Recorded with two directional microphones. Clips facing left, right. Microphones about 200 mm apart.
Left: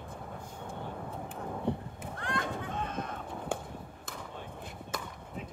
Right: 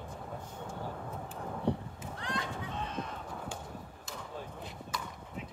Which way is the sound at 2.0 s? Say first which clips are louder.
Left 3 dB; 50° left (ahead or behind).